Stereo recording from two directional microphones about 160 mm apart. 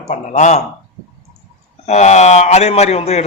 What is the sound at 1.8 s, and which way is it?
A man's voice, 45° left (ahead or behind).